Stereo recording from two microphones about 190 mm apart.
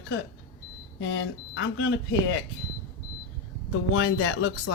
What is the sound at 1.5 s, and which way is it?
Speech, 80° left.